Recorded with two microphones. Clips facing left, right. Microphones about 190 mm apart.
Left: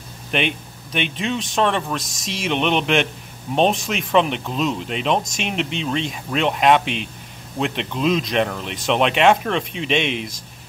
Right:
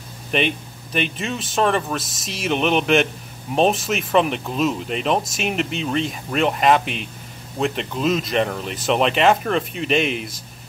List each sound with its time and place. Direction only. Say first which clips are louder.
0.3 s speech: right 1 dB; centre (ahead or behind)